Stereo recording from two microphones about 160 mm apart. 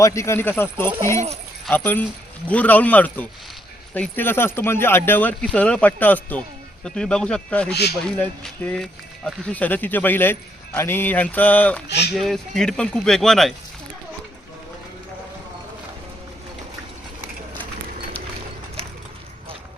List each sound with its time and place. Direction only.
0.0 s speech: 20° left (ahead or behind)
7.7 s speech: 90° left
8.2 s speech: 10° left (ahead or behind)
11.9 s speech: 90° left
12.1 s speech: centre (ahead or behind)
18.8 s a sound: 40° right (ahead or behind)